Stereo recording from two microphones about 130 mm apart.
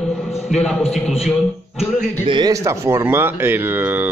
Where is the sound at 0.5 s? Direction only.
Centre (ahead or behind).